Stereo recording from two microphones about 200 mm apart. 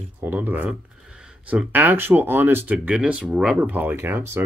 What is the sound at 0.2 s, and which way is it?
Speech, 10° right (ahead or behind).